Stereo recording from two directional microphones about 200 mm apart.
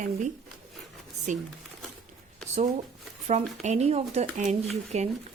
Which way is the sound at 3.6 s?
35° right (ahead or behind).